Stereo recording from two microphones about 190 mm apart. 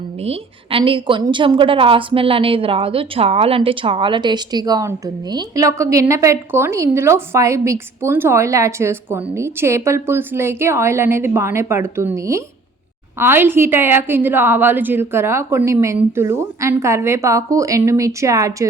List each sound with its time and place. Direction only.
0.2 s a woman's voice: 30° right (ahead or behind)